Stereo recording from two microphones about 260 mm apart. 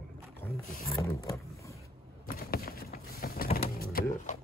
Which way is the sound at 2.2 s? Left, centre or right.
Left.